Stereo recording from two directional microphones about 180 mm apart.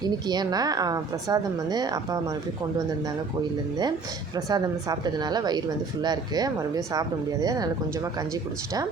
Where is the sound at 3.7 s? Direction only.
20° right (ahead or behind).